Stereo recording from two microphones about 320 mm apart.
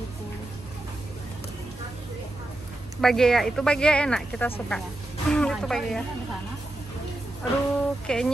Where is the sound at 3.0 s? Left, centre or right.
Centre.